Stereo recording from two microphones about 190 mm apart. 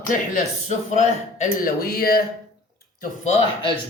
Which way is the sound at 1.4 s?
50° left (ahead or behind).